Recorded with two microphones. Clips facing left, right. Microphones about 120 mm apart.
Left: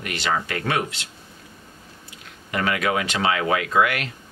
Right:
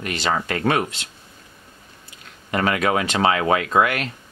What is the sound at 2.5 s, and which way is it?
Speech, 35° right (ahead or behind).